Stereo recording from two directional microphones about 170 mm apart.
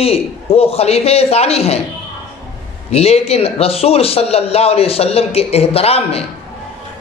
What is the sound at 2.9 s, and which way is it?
A man's voice, 35° left (ahead or behind).